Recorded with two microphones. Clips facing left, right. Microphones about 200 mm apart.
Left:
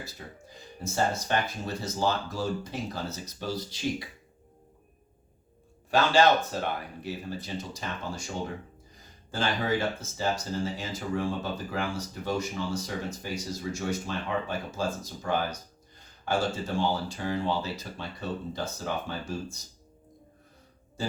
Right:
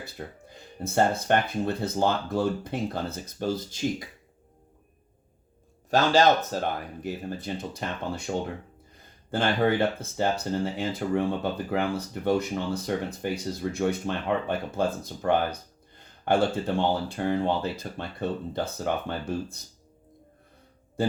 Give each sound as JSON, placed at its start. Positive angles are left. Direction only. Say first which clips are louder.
{"t": 0.0, "sound": "speech", "louder": "right 4 dB", "side_deg": -55}
{"t": 5.9, "sound": "speech", "louder": "right 2 dB", "side_deg": -40}
{"t": 21.0, "sound": "speech", "louder": "right 6 dB", "side_deg": -55}